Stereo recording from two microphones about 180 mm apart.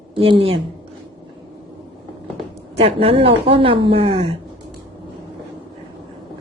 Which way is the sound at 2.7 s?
30° right (ahead or behind).